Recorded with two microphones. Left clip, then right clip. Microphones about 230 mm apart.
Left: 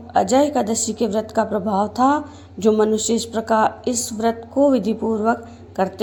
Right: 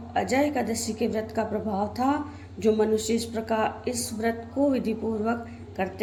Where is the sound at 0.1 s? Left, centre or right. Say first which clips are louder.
Left 8 dB; left.